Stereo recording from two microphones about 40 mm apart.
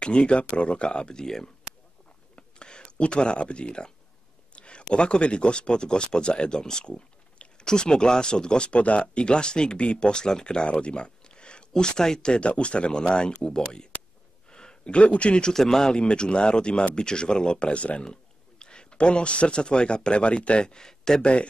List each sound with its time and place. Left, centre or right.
0.0 s speech: left
2.3 s a sound: left
4.9 s speech: left
14.5 s a sound: centre
14.9 s speech: left
15.5 s speech: centre
21.2 s speech: left